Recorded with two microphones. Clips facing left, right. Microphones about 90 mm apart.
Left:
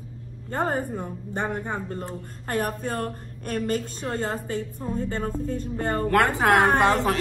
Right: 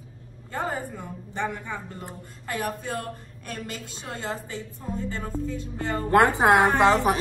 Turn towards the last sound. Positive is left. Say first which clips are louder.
# right 1 dB
turn(degrees=-20)  # may be behind; listen again after turning